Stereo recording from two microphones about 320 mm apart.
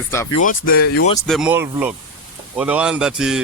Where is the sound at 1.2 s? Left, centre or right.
Centre.